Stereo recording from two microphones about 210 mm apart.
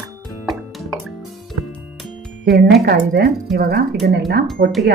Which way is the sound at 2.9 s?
50° right (ahead or behind).